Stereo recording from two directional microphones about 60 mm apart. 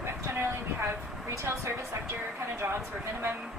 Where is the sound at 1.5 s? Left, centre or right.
Right.